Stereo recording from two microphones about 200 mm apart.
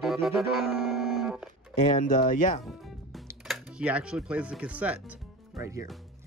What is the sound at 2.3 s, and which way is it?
Speech, 40° left (ahead or behind).